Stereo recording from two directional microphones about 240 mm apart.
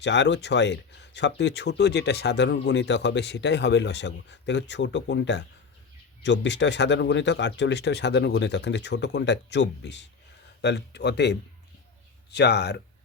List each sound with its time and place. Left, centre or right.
0.0 s speech: left